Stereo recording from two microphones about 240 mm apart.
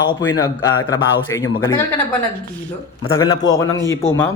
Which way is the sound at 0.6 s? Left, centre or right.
Centre.